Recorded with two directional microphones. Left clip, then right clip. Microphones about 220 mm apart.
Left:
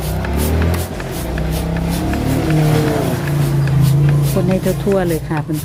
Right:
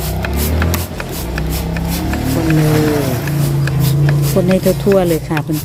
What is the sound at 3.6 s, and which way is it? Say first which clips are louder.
Music: right 1 dB; 35° right (ahead or behind).